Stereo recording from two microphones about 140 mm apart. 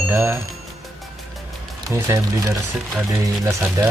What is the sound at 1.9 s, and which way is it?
Speech, 20° right (ahead or behind).